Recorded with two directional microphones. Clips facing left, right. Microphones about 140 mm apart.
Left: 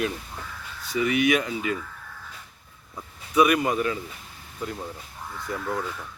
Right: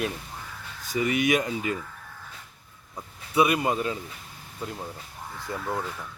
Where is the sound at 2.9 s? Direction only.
25° right (ahead or behind).